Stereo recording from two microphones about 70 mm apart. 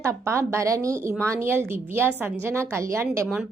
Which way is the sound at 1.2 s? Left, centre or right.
Right.